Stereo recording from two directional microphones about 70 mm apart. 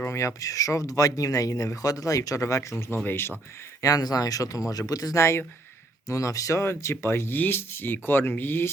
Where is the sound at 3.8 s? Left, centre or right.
Left.